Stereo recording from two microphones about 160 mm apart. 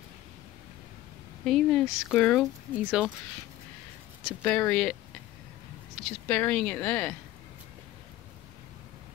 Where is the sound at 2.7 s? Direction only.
10° right (ahead or behind).